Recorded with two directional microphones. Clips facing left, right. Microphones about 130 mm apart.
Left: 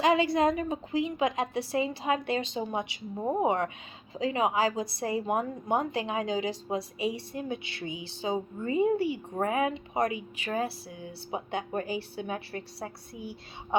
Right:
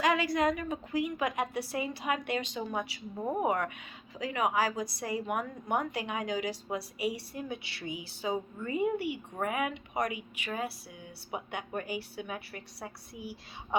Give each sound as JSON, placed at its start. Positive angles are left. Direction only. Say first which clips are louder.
{"t": 0.0, "sound": "a woman's voice", "louder": "left 4 dB", "side_deg": 25}